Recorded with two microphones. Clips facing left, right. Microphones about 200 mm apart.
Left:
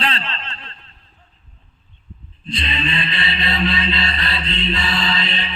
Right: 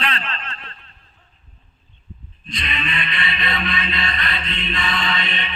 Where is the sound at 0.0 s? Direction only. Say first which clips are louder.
Left 2 dB; 30° left (ahead or behind).